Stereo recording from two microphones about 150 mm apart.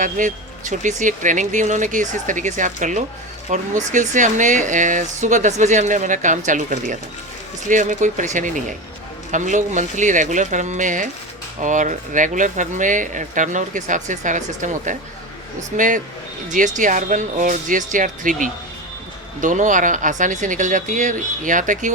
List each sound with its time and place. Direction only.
0.0 s speech: 55° right (ahead or behind)